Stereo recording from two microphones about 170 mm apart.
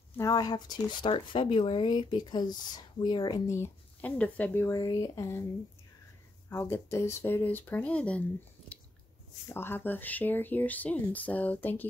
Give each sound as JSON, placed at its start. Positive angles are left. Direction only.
{"t": 0.2, "sound": "speech", "side_deg": 20}
{"t": 4.6, "sound": "speech", "side_deg": 20}
{"t": 6.5, "sound": "speech", "side_deg": 15}
{"t": 9.5, "sound": "speech", "side_deg": 15}